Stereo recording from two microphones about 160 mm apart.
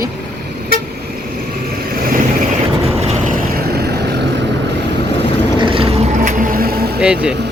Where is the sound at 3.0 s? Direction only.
50° right (ahead or behind); by 4.2 s 90° right.